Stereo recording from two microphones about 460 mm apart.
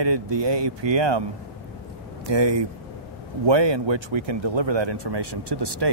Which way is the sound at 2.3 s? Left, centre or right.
Right.